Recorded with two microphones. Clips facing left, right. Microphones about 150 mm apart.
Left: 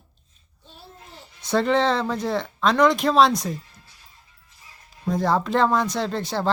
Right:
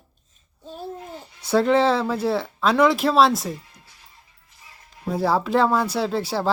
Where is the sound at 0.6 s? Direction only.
45° right (ahead or behind).